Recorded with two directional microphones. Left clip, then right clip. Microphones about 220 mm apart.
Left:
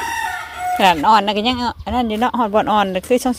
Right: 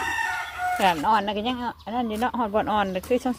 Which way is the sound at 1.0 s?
25° left (ahead or behind).